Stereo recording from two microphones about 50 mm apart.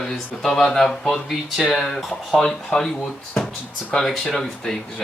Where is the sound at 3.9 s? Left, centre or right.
Centre.